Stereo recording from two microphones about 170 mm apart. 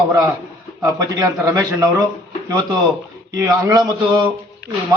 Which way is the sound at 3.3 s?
20° right (ahead or behind).